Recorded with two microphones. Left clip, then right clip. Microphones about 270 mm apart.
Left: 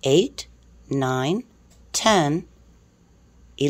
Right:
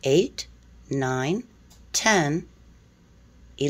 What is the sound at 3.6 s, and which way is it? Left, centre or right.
Speech, centre.